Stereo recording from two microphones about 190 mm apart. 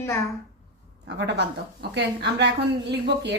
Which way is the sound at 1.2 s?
65° right (ahead or behind).